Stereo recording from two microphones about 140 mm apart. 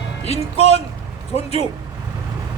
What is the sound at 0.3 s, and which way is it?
Speech, 45° left (ahead or behind).